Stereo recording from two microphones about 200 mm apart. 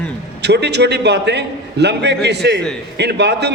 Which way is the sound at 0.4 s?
55° right (ahead or behind).